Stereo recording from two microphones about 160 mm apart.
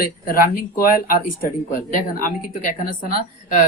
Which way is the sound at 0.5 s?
65° left (ahead or behind).